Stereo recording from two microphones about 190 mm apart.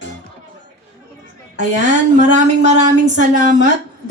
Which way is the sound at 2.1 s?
40° right (ahead or behind).